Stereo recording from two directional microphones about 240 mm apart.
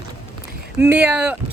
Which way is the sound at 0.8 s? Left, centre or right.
Centre.